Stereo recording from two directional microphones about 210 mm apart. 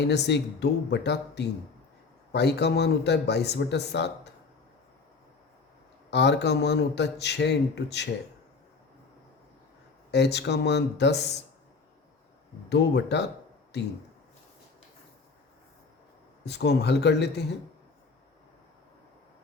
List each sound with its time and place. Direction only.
0.0 s a man's voice: 55° left (ahead or behind)
6.1 s a man's voice: 55° left (ahead or behind)
10.1 s a man's voice: 55° left (ahead or behind)
12.6 s a man's voice: 55° left (ahead or behind)
16.5 s a man's voice: 55° left (ahead or behind)